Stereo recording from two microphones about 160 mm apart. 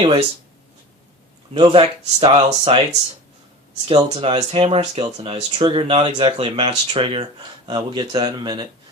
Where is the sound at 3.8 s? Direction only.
35° right (ahead or behind).